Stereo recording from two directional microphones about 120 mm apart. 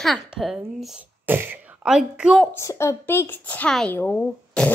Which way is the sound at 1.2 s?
15° right (ahead or behind).